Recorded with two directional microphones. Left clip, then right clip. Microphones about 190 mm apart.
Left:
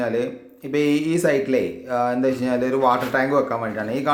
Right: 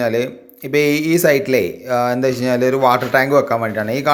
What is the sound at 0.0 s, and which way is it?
Speech, 25° right (ahead or behind).